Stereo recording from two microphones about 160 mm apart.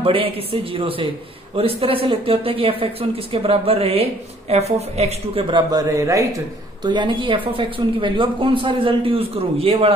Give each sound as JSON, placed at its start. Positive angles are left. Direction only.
{"t": 0.0, "sound": "speech", "side_deg": -35}
{"t": 5.7, "sound": "a man's voice", "side_deg": -20}